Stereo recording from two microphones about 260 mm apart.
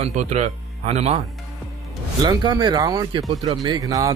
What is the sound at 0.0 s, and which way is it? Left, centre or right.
Speech, right.